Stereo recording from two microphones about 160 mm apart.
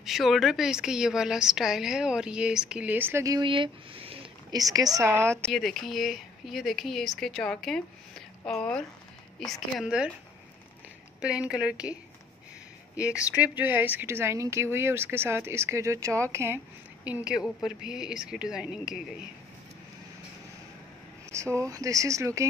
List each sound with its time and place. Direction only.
0.0 s a woman's voice: centre (ahead or behind); by 4.6 s 35° right (ahead or behind)
4.6 s speech: 20° right (ahead or behind)
5.5 s a woman's voice: centre (ahead or behind)
11.1 s speech: 5° right (ahead or behind)
13.4 s a woman's voice: 10° right (ahead or behind)
21.3 s speech: 20° right (ahead or behind)